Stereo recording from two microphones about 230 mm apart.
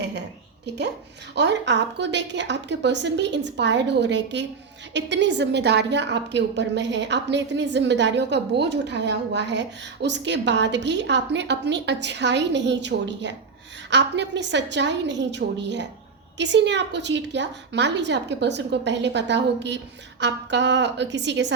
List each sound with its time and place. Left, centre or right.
1.4 s a woman's voice: right